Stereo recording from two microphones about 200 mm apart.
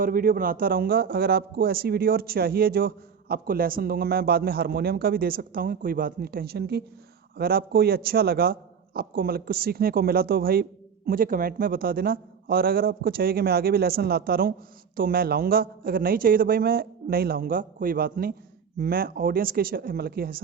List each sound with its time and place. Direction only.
0.0 s a man's voice: 45° right (ahead or behind)